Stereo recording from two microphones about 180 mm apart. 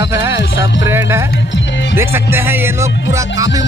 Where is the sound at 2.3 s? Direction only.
10° right (ahead or behind).